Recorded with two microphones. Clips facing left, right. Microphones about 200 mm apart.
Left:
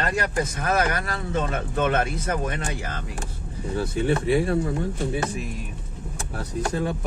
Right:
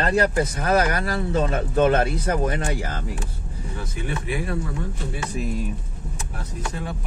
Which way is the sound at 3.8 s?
30° left (ahead or behind).